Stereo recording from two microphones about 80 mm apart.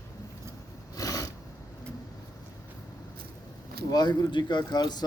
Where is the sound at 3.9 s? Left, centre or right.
Left.